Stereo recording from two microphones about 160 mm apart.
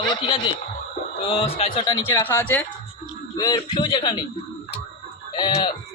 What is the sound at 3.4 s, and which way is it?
Speech, 25° left (ahead or behind).